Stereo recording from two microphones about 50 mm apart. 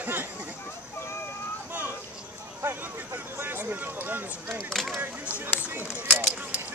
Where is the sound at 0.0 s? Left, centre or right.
Right.